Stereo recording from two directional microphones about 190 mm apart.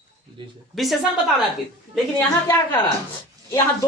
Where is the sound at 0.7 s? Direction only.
Centre (ahead or behind).